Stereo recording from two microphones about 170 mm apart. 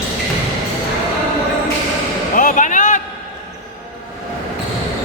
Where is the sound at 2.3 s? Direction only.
50° left (ahead or behind).